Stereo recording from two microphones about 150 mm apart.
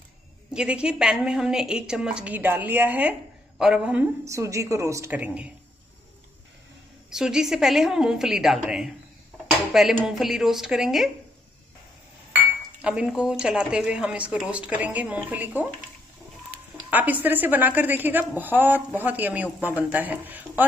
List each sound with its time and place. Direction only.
0.5 s a woman's voice: 5° right (ahead or behind)
4.2 s a woman's voice: 20° right (ahead or behind)
7.1 s a woman's voice: 5° right (ahead or behind)
12.8 s speech: 5° right (ahead or behind)
16.9 s speech: 10° right (ahead or behind)